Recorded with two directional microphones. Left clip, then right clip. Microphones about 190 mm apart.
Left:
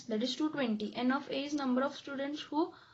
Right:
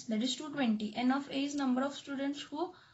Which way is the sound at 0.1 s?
30° left (ahead or behind).